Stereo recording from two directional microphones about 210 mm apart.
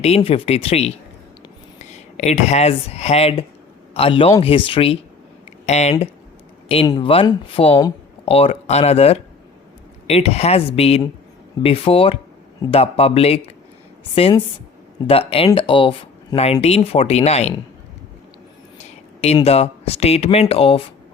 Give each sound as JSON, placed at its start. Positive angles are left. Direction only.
{"t": 0.0, "sound": "speech", "side_deg": 30}
{"t": 6.8, "sound": "speech", "side_deg": 20}
{"t": 19.2, "sound": "speech", "side_deg": 30}